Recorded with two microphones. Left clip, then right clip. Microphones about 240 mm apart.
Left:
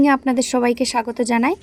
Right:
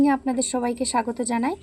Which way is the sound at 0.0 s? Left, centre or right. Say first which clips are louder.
Left 5 dB; left.